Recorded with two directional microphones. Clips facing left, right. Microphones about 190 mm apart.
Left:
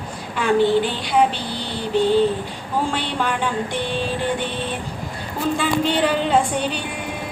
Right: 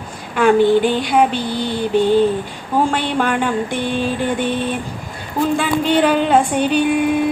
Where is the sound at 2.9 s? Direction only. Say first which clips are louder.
Right 5 dB; 50° right (ahead or behind).